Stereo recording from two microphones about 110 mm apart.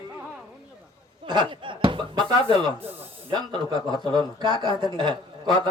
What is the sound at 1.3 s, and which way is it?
Speech, 45° right (ahead or behind).